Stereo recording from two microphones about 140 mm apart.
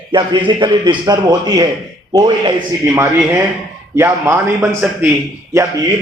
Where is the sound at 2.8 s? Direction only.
20° right (ahead or behind).